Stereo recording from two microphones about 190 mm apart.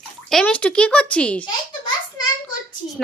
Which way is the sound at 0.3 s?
5° left (ahead or behind).